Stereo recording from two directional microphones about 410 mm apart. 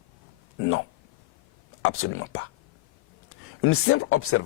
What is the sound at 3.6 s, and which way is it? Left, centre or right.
Speech, left.